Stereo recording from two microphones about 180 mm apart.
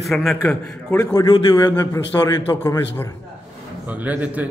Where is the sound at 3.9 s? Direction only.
10° right (ahead or behind).